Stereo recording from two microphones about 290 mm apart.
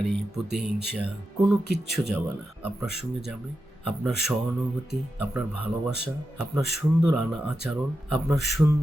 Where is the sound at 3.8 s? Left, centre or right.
Centre.